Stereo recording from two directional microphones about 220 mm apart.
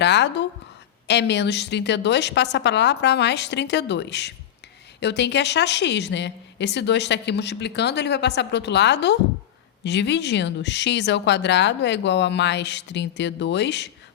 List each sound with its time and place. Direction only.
0.0 s a woman's voice: 50° left (ahead or behind)